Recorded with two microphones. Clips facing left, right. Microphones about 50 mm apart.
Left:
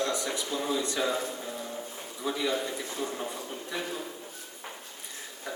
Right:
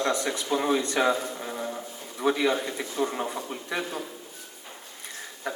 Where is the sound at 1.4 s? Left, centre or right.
Right.